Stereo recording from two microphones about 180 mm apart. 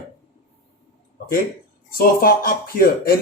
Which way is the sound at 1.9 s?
55° left (ahead or behind).